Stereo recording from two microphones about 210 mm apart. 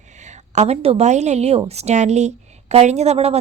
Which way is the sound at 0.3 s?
30° right (ahead or behind).